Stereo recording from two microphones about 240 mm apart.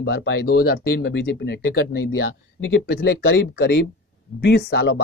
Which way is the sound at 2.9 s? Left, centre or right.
Left.